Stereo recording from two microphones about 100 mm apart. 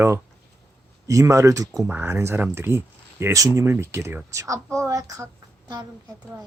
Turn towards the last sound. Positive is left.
turn(degrees=-35)  # may be behind; listen again after turning